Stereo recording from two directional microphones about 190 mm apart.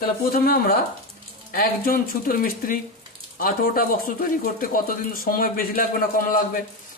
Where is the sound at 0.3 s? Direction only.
50° left (ahead or behind).